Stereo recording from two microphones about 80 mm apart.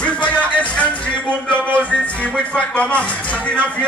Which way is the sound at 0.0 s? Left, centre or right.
Centre.